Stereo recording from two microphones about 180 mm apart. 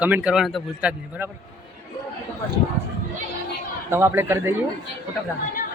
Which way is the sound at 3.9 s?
15° right (ahead or behind).